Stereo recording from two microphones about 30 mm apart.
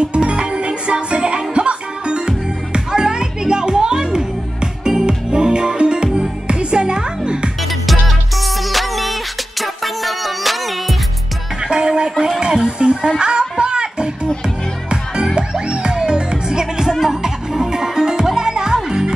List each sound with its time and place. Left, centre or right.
0.2 s music: right
8.6 s music: centre
11.6 s music: right
12.4 s a sound: right
13.2 s music: right
15.8 s music: right